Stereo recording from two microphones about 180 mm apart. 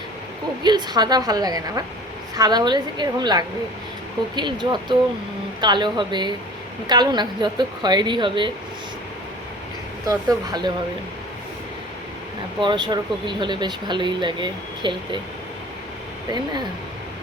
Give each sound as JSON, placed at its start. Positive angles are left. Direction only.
{"t": 0.6, "sound": "speech", "side_deg": -25}
{"t": 10.1, "sound": "speech", "side_deg": -20}
{"t": 12.5, "sound": "speech", "side_deg": -25}
{"t": 16.3, "sound": "speech", "side_deg": -25}